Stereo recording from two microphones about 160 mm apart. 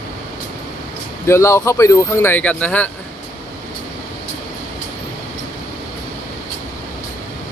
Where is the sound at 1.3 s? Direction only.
15° left (ahead or behind).